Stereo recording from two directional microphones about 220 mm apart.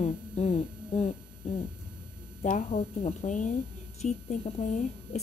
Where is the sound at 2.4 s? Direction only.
35° left (ahead or behind).